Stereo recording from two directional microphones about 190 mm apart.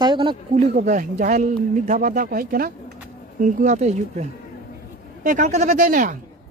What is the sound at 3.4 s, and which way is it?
Speech, 35° right (ahead or behind).